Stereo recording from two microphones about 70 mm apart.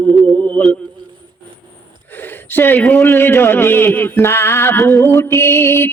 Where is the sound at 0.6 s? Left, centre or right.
Left.